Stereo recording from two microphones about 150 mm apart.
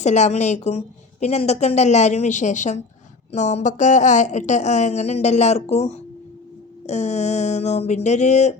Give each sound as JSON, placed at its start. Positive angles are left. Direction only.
{"t": 0.0, "sound": "a woman's voice", "side_deg": 50}